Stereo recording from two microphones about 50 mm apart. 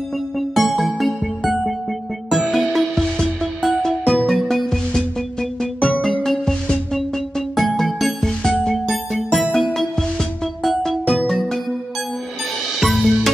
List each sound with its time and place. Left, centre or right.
0.4 s music: centre
2.2 s music: centre
4.3 s music: centre
5.6 s music: centre
12.8 s music: centre